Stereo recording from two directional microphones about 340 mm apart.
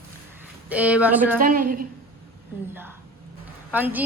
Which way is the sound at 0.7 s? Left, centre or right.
Centre.